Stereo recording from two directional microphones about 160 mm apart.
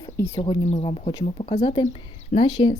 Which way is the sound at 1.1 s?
30° left (ahead or behind).